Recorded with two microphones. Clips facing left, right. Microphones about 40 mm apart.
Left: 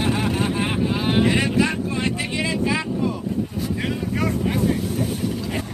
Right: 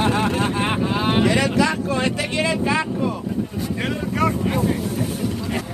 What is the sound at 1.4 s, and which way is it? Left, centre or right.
Speech, right.